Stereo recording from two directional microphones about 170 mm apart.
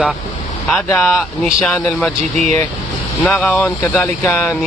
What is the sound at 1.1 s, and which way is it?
Speech, centre (ahead or behind).